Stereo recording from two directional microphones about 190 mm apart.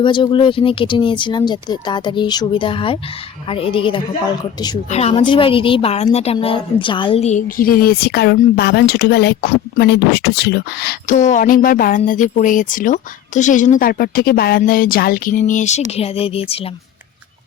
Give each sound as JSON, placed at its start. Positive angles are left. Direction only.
{"t": 0.0, "sound": "a woman's voice", "side_deg": 25}
{"t": 11.2, "sound": "a woman's voice", "side_deg": 40}